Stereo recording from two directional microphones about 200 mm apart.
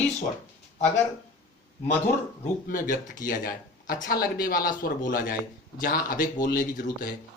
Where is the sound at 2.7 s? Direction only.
40° left (ahead or behind).